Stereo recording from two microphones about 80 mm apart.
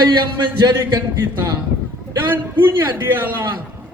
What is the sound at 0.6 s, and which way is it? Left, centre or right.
Speech, right.